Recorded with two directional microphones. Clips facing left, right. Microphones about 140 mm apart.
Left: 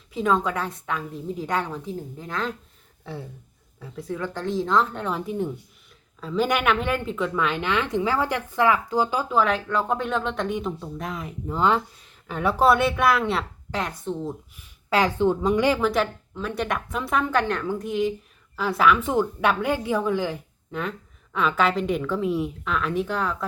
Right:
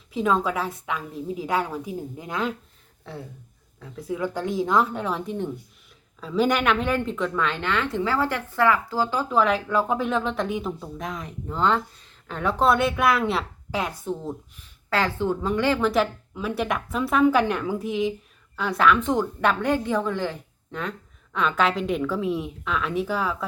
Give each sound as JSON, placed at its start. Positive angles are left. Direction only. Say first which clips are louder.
{"t": 0.1, "sound": "speech", "louder": "even", "side_deg": 0}
{"t": 3.0, "sound": "speech", "louder": "left 2 dB", "side_deg": 0}
{"t": 4.1, "sound": "a woman's voice", "louder": "right 1 dB", "side_deg": -10}
{"t": 9.3, "sound": "speech", "louder": "right 3 dB", "side_deg": 0}
{"t": 14.8, "sound": "a woman's voice", "louder": "left 3 dB", "side_deg": 15}
{"t": 15.8, "sound": "a woman's voice", "louder": "right 1 dB", "side_deg": 0}